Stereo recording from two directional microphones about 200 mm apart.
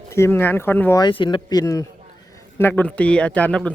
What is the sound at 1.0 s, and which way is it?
A man's voice, 25° left (ahead or behind).